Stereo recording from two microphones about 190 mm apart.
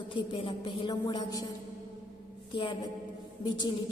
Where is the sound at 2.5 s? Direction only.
25° left (ahead or behind).